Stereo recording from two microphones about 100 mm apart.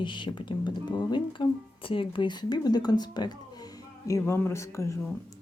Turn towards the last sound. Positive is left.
turn(degrees=30)  # may be behind; listen again after turning